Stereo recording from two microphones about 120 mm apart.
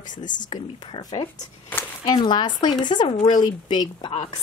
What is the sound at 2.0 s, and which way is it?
Speech, 40° left (ahead or behind).